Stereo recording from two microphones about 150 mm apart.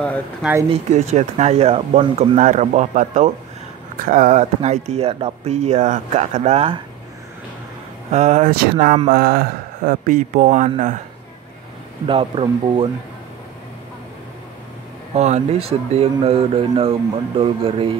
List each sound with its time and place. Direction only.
0.4 s speech: 15° right (ahead or behind)
0.7 s speech: 50° right (ahead or behind)
8.1 s speech: 50° right (ahead or behind)
8.5 s speech: 75° right (ahead or behind); by 10.7 s 55° right (ahead or behind)
12.1 s speech: 35° right (ahead or behind)
15.1 s speech: 50° right (ahead or behind)